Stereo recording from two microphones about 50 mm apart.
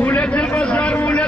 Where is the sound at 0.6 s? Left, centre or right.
Left.